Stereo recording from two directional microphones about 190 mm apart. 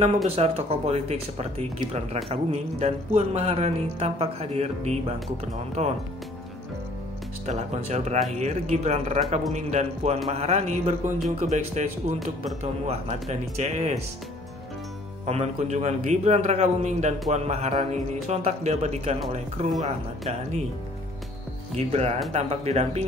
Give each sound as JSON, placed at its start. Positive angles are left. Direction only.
{"t": 0.4, "sound": "speech", "side_deg": -35}
{"t": 7.4, "sound": "speech", "side_deg": -35}
{"t": 15.2, "sound": "speech", "side_deg": -35}
{"t": 21.7, "sound": "speech", "side_deg": -35}